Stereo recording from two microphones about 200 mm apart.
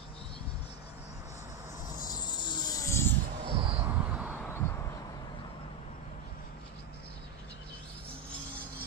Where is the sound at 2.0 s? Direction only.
20° left (ahead or behind).